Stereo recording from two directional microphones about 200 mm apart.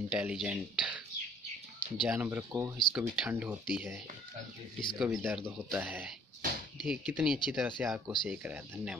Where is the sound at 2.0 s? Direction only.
5° right (ahead or behind).